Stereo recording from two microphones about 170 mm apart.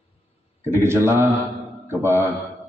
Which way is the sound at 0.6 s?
15° right (ahead or behind).